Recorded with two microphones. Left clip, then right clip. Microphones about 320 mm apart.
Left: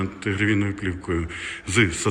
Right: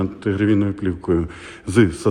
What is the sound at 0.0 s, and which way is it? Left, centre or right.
A man's voice, centre.